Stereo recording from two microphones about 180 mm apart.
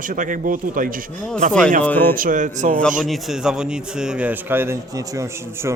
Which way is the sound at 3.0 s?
Centre (ahead or behind).